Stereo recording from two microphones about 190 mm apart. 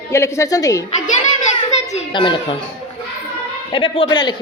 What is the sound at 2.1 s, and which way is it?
Speech, 25° left (ahead or behind).